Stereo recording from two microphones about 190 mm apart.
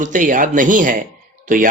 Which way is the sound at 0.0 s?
45° right (ahead or behind).